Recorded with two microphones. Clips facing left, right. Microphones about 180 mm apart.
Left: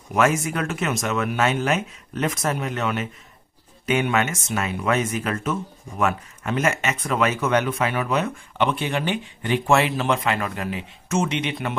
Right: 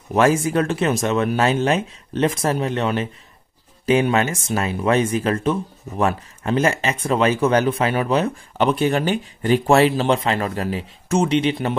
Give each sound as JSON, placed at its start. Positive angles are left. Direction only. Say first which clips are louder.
{"t": 0.1, "sound": "speech", "louder": "right 4 dB", "side_deg": -30}